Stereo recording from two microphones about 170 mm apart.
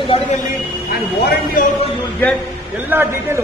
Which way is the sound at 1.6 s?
55° left (ahead or behind).